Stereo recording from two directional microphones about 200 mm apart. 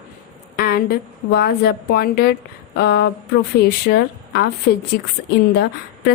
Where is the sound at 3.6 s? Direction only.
55° left (ahead or behind).